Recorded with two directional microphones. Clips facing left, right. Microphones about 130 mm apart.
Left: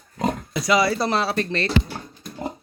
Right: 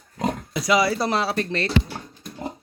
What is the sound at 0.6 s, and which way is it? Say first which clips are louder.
Speech: even; 15° right (ahead or behind).